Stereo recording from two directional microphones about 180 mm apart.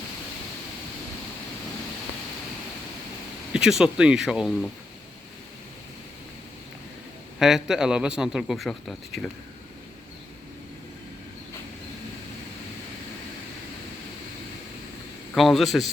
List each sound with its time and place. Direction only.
3.5 s a man's voice: 5° right (ahead or behind)
7.3 s a man's voice: centre (ahead or behind)
15.4 s a man's voice: centre (ahead or behind)